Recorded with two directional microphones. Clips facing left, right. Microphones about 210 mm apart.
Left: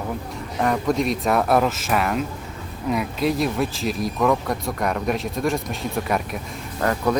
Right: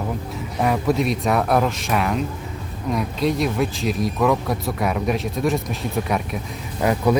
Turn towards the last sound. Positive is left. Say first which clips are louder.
# right 3 dB
turn(degrees=-10)  # may be behind; listen again after turning